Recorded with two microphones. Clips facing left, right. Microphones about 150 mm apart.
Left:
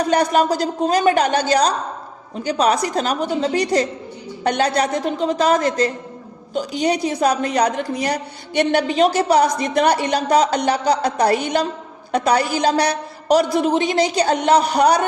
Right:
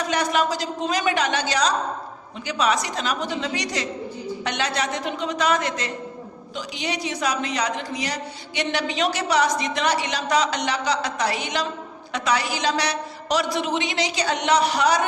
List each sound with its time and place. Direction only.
0.0 s a woman's voice: 40° left (ahead or behind)